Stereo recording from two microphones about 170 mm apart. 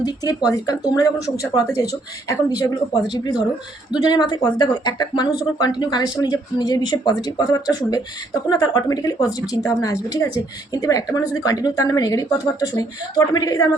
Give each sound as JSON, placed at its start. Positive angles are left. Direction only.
{"t": 0.0, "sound": "a woman's voice", "side_deg": 20}
{"t": 2.3, "sound": "a woman's voice", "side_deg": 20}